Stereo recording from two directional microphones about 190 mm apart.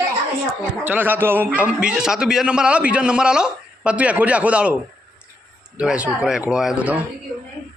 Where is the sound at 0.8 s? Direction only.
10° right (ahead or behind).